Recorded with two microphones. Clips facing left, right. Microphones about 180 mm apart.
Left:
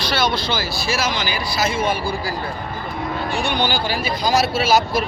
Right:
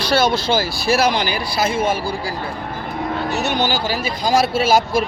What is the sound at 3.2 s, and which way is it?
Speech, 40° right (ahead or behind).